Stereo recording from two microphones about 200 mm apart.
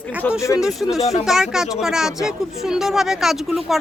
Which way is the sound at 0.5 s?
5° right (ahead or behind).